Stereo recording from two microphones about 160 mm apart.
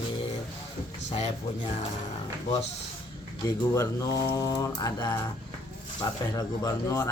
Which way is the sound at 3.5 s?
20° left (ahead or behind).